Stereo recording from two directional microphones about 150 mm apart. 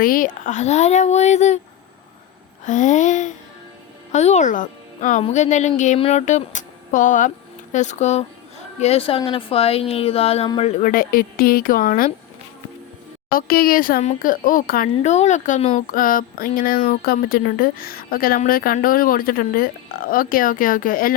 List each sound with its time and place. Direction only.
0.0 s speech: 65° left (ahead or behind); by 1.6 s 50° left (ahead or behind)
2.6 s a woman's voice: 55° left (ahead or behind); by 10.5 s 40° left (ahead or behind)
10.8 s speech: 70° left (ahead or behind)
13.3 s speech: 75° left (ahead or behind)
14.0 s speech: 60° left (ahead or behind)
15.1 s speech: 50° left (ahead or behind); by 21.2 s 70° left (ahead or behind)